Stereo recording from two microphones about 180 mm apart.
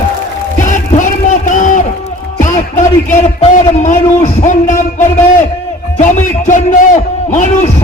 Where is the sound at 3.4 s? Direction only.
40° left (ahead or behind).